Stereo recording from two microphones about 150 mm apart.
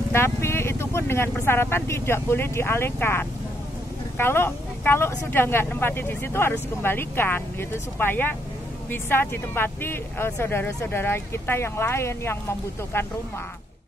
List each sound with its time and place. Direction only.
0.1 s speech: 15° left (ahead or behind)